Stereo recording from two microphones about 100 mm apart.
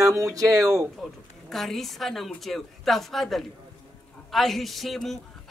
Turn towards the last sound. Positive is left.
turn(degrees=0)  # may be behind; listen again after turning